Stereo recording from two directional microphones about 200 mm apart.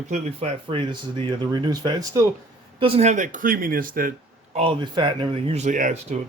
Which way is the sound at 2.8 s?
30° right (ahead or behind).